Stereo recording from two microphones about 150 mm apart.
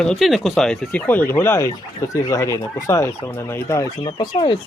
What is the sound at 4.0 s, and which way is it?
Speech, 30° left (ahead or behind).